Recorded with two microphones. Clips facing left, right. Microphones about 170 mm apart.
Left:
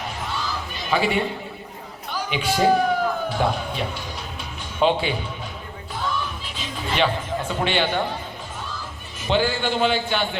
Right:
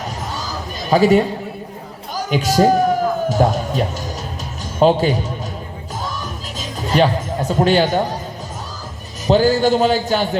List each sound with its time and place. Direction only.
0.0 s honk: 40° right (ahead or behind)
2.1 s a man's voice: 40° right (ahead or behind)
6.0 s music: 40° right (ahead or behind)
9.2 s a man's voice: 40° right (ahead or behind)